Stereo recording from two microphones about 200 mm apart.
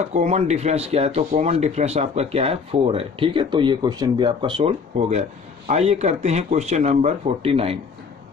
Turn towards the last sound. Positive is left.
turn(degrees=-30)  # may be behind; listen again after turning